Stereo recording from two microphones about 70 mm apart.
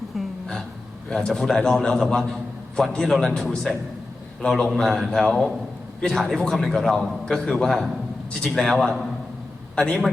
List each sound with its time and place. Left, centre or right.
0.1 s a sound: centre
1.3 s a man's voice: centre
9.7 s a man's voice: centre